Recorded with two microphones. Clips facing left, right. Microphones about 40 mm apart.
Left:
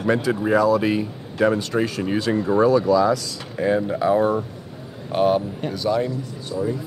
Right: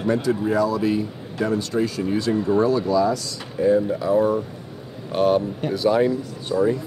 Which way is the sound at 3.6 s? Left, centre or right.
Left.